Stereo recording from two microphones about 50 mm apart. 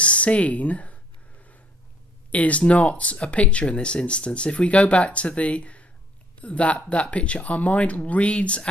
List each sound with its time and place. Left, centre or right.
0.0 s speech: left
2.3 s speech: left